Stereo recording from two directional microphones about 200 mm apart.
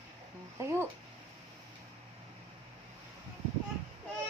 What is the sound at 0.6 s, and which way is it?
Speech, 15° right (ahead or behind).